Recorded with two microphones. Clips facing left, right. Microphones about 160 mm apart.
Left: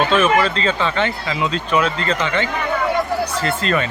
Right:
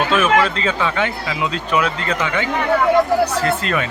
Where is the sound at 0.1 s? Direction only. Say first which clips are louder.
Even; 10° right (ahead or behind).